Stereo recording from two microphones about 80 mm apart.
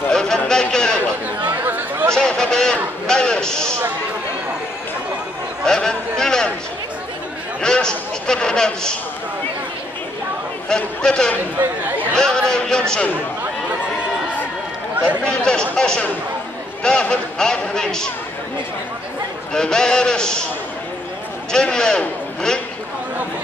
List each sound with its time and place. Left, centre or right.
0.1 s speech: centre
1.5 s chatter: right
2.1 s a man's voice: centre
5.7 s a man's voice: centre
7.6 s a man's voice: centre
10.7 s a man's voice: centre
11.5 s speech: right
12.2 s a man's voice: centre
15.2 s a man's voice: centre
19.5 s a man's voice: centre
21.5 s a man's voice: centre